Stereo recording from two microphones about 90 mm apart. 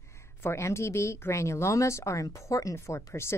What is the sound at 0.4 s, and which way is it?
A woman's voice, 30° left (ahead or behind).